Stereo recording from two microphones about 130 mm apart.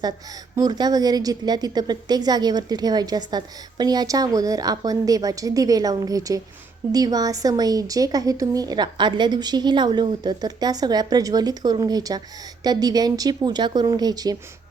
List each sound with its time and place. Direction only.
0.5 s a woman's voice: 30° right (ahead or behind)